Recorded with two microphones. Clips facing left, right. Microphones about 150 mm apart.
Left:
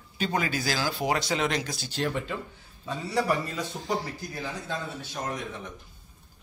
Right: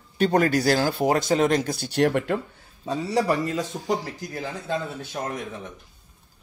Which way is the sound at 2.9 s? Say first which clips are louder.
Right 4 dB; 40° right (ahead or behind).